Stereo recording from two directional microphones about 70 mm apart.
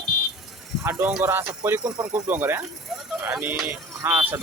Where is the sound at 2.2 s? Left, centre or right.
Right.